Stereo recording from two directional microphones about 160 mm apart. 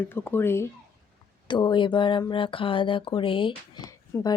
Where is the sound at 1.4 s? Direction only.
30° left (ahead or behind).